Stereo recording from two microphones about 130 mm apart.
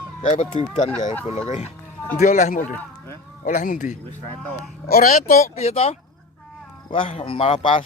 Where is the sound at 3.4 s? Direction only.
85° left.